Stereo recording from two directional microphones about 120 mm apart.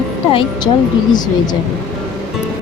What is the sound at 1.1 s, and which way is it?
Speech, 35° left (ahead or behind).